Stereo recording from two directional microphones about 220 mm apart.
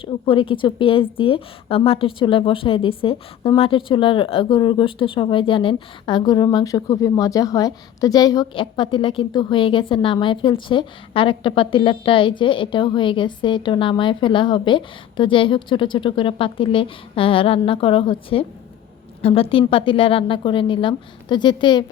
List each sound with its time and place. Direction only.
0.0 s a woman's voice: 25° left (ahead or behind)